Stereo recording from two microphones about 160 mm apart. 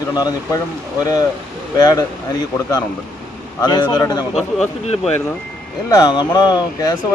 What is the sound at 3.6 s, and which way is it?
Speech, 25° left (ahead or behind).